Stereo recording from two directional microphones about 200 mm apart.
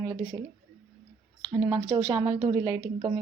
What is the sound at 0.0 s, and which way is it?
Speech, 20° right (ahead or behind).